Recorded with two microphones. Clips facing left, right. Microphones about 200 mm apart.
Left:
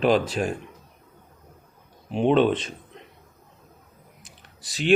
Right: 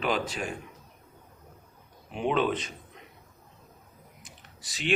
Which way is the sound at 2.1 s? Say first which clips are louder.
Left 7 dB; 30° left (ahead or behind).